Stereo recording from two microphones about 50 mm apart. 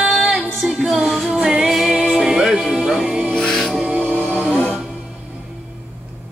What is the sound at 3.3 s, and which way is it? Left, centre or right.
Music, centre.